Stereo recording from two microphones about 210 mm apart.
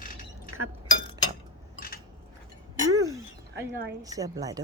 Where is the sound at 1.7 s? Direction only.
45° left (ahead or behind).